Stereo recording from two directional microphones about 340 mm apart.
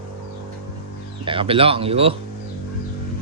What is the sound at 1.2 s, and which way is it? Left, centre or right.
Speech, centre.